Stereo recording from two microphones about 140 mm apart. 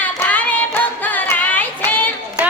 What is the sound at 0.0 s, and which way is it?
Singing, 10° left (ahead or behind).